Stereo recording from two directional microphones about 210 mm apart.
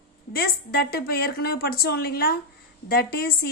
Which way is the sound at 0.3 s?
45° left (ahead or behind).